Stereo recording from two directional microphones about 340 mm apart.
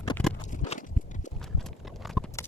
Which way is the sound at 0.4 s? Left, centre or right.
Left.